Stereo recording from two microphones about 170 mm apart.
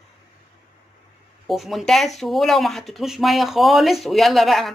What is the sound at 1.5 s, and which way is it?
Speech, centre (ahead or behind).